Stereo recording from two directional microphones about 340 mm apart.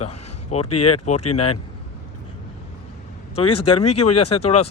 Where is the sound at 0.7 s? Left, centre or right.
Left.